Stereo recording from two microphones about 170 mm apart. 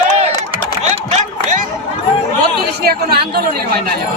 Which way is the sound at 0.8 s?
40° right (ahead or behind).